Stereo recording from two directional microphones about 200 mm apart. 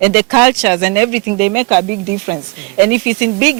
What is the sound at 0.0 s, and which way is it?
Speech, 10° right (ahead or behind).